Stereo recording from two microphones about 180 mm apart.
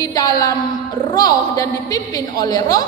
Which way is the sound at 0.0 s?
20° left (ahead or behind).